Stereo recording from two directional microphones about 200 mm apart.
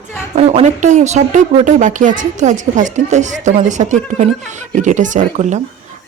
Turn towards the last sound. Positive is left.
turn(degrees=-35)  # may be behind; listen again after turning